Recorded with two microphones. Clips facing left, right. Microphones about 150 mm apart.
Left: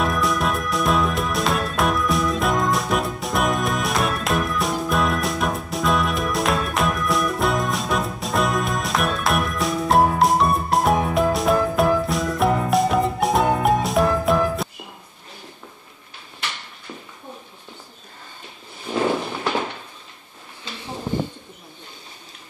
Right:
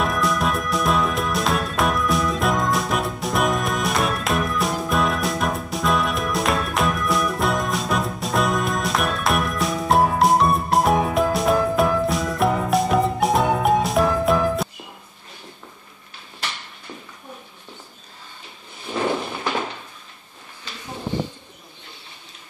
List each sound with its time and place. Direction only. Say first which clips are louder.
0.0 s music: even; centre (ahead or behind)
21.1 s bird: left 1 dB; 50° left (ahead or behind)